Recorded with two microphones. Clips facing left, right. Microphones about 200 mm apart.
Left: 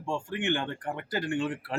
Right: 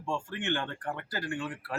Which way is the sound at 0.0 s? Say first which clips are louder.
Left 3 dB; 15° left (ahead or behind).